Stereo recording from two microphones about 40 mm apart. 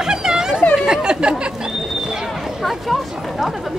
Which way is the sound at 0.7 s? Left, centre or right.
Centre.